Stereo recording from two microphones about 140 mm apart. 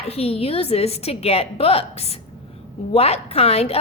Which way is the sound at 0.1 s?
45° left (ahead or behind).